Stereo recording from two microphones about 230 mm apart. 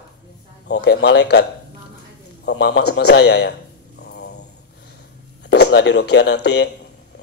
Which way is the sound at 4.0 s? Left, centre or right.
Left.